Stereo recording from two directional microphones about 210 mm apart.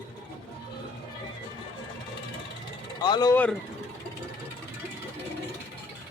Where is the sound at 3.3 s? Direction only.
5° left (ahead or behind).